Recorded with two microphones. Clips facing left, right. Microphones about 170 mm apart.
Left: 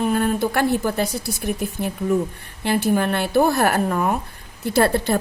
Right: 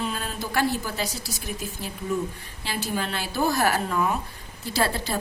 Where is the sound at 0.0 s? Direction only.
55° left (ahead or behind).